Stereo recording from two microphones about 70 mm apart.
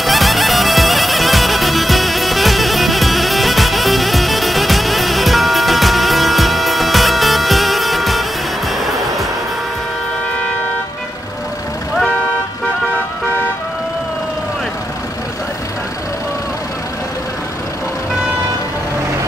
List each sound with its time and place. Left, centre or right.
0.0 s music: centre